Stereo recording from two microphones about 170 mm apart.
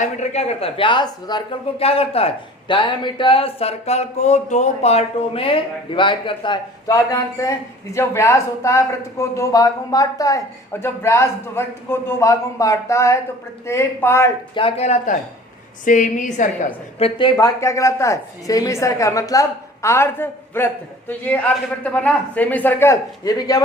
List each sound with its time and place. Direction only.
0.0 s speech: 40° left (ahead or behind); by 14.3 s 15° left (ahead or behind)
14.5 s a woman's voice: 35° left (ahead or behind)
17.2 s speech: 25° left (ahead or behind)